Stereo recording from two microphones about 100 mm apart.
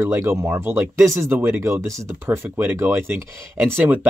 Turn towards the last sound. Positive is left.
turn(degrees=-20)  # may be behind; listen again after turning